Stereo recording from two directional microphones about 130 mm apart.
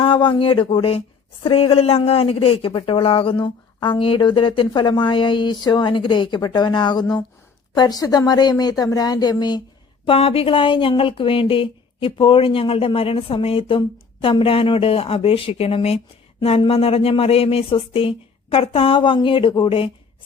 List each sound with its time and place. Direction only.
0.0 s speech: 40° left (ahead or behind)
10.1 s speech: 45° left (ahead or behind)